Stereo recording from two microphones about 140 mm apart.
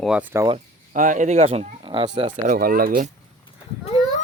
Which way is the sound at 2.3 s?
75° right (ahead or behind).